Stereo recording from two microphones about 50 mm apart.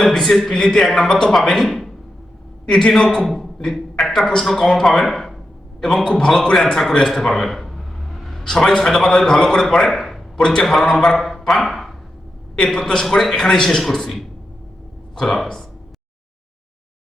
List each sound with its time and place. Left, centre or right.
0.0 s a man's voice: centre
2.6 s a man's voice: centre
7.0 s a sound: centre
8.4 s a man's voice: centre
10.3 s a man's voice: centre
11.2 s speech: centre
12.5 s a man's voice: centre